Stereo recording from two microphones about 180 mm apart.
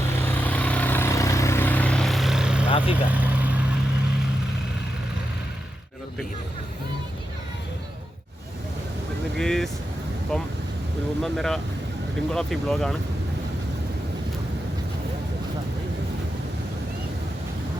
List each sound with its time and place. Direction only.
0.3 s vehicle: 10° left (ahead or behind)
2.6 s vehicle: 30° left (ahead or behind)
2.9 s vehicle: 10° right (ahead or behind)
9.4 s vehicle: 5° left (ahead or behind)
12.3 s speech: 5° left (ahead or behind)